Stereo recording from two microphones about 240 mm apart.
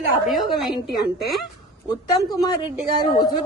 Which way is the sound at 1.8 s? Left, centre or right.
Centre.